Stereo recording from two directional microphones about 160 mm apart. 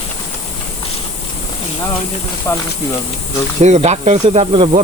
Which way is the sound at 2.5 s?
15° left (ahead or behind).